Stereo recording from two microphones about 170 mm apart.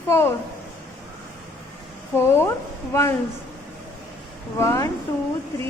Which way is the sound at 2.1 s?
15° left (ahead or behind).